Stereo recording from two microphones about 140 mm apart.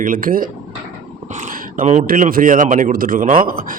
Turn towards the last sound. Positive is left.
turn(degrees=-80)